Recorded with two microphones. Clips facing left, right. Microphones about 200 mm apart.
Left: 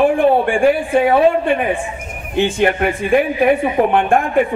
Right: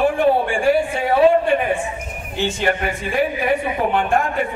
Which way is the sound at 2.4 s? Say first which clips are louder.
Left 6 dB; 55° left (ahead or behind).